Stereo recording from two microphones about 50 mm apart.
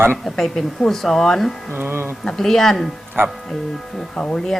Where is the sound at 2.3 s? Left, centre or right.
Centre.